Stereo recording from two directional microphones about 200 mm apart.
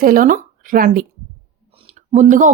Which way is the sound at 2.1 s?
40° right (ahead or behind).